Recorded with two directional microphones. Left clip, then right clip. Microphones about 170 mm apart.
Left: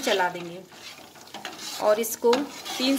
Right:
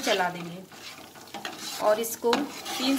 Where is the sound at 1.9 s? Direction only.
65° left (ahead or behind).